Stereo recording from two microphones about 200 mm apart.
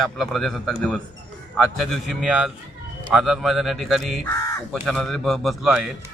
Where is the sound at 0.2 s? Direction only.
Centre (ahead or behind).